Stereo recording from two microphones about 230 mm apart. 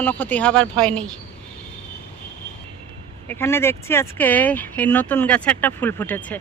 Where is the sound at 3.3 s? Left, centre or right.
Centre.